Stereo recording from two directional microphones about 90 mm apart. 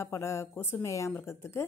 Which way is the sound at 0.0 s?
35° left (ahead or behind).